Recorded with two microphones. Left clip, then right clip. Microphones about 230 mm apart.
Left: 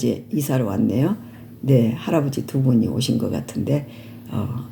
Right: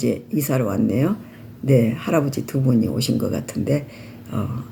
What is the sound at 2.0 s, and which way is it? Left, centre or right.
Speech, right.